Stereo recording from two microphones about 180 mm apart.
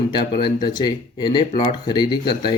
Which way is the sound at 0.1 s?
25° left (ahead or behind).